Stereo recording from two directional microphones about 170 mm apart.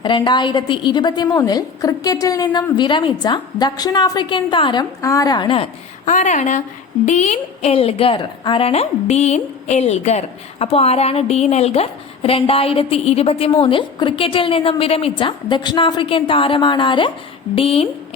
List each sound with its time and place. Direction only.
0.0 s a woman's voice: 25° left (ahead or behind)
6.1 s a woman's voice: 45° left (ahead or behind)